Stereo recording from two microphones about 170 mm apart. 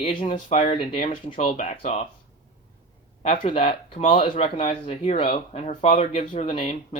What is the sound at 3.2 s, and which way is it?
Speech, 40° left (ahead or behind).